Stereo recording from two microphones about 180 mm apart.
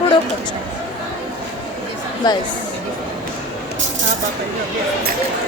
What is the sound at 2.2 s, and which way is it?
Speech, 25° left (ahead or behind).